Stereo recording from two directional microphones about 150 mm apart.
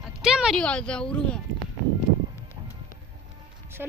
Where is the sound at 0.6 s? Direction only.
5° left (ahead or behind).